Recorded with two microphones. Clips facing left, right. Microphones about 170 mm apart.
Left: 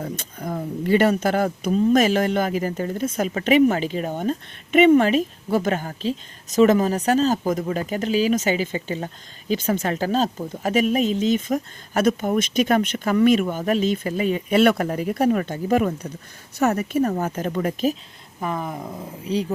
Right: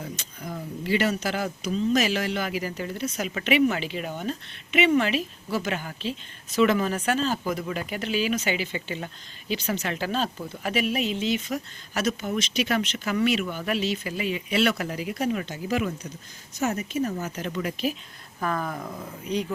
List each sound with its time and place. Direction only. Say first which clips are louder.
0.0 s speech: left 6 dB; 55° left (ahead or behind)
16.6 s speech: left 6 dB; 60° left (ahead or behind)
18.3 s speech: left 1 dB; 20° left (ahead or behind)